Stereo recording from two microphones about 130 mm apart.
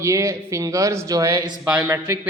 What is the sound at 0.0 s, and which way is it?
Speech, 20° right (ahead or behind).